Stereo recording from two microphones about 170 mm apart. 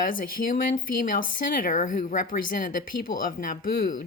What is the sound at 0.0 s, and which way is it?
Speech, 55° left (ahead or behind).